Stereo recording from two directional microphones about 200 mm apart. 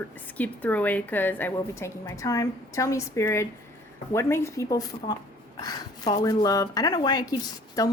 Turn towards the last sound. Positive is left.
turn(degrees=20)  # may be behind; listen again after turning